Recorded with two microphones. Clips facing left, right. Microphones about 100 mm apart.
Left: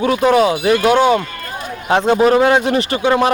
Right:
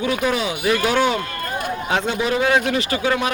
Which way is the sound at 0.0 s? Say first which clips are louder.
Left 8 dB; 35° left (ahead or behind).